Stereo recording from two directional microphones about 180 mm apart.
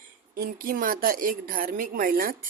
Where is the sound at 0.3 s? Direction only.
50° right (ahead or behind).